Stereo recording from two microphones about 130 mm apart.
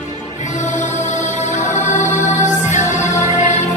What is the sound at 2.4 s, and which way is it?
Music, 65° left (ahead or behind).